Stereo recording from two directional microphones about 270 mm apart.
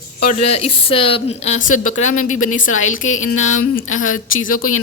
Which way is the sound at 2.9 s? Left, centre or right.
Left.